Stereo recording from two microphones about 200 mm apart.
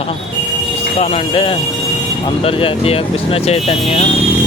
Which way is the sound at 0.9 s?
30° left (ahead or behind).